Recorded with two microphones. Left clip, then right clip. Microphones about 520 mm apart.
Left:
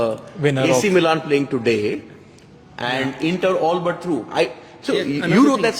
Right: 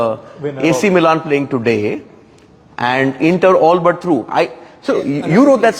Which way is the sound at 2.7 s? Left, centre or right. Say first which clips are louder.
Right 8 dB; right.